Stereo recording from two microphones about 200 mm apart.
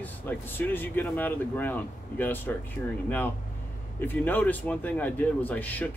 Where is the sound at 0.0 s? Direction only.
10° left (ahead or behind).